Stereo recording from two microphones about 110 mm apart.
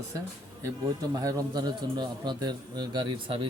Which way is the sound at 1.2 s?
35° right (ahead or behind).